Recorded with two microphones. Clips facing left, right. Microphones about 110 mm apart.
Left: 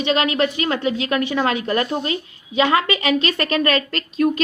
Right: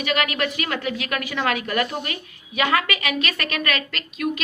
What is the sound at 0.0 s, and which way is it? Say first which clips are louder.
A woman's voice: left 5 dB; 25° left (ahead or behind).